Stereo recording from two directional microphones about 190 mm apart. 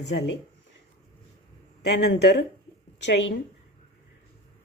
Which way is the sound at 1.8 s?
60° left (ahead or behind).